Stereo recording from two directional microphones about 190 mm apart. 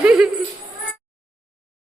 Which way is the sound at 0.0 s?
5° right (ahead or behind).